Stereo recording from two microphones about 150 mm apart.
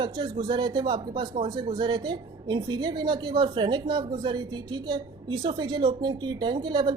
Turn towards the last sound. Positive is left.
turn(degrees=-30)  # may be behind; listen again after turning